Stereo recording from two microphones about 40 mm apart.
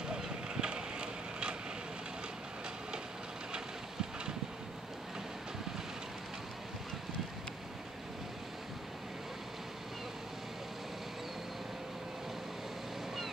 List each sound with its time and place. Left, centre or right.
0.1 s vehicle: right